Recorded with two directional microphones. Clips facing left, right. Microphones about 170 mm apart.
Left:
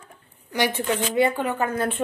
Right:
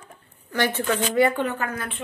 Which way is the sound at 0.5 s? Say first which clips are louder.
Even; 15° left (ahead or behind).